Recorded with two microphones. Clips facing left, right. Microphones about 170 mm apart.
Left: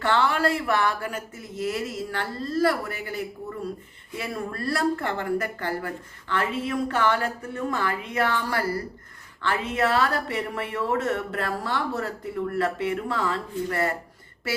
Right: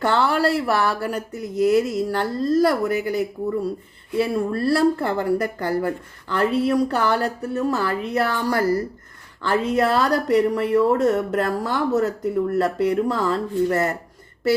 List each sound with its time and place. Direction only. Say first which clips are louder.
0.0 s speech: right 3 dB; 40° right (ahead or behind)
4.2 s speech: right 10 dB; 30° right (ahead or behind)